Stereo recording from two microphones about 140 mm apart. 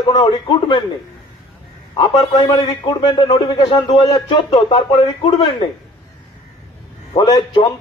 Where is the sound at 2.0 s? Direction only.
35° left (ahead or behind).